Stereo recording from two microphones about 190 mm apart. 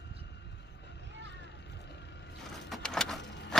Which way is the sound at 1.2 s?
65° left (ahead or behind).